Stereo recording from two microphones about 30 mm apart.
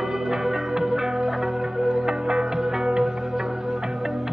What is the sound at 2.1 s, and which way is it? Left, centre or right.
Music, right.